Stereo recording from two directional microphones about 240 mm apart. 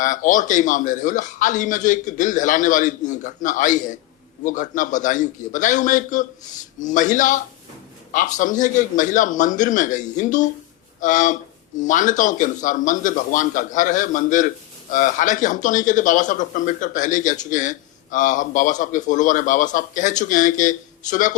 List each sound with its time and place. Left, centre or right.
0.0 s speech: left